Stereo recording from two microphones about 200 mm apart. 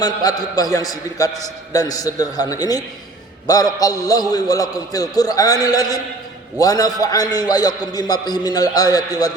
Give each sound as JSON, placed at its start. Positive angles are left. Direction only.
{"t": 0.0, "sound": "a man's voice", "side_deg": 20}